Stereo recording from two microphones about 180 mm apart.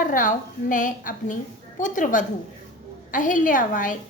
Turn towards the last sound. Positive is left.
turn(degrees=45)  # may be behind; listen again after turning